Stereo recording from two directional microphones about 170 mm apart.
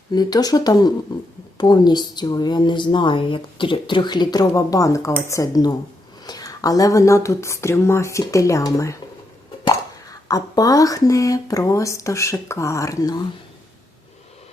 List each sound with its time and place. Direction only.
0.1 s a woman's voice: 25° left (ahead or behind)